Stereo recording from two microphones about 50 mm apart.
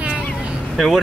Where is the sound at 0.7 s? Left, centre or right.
Centre.